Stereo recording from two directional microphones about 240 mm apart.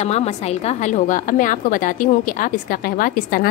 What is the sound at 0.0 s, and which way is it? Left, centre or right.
A woman's voice, left.